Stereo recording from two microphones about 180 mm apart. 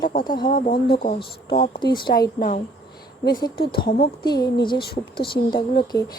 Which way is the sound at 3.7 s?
60° left (ahead or behind).